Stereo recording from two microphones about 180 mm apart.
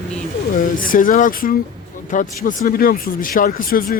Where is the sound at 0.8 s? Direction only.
50° left (ahead or behind).